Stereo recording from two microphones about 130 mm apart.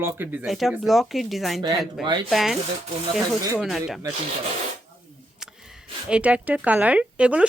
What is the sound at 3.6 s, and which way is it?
Speech, centre (ahead or behind).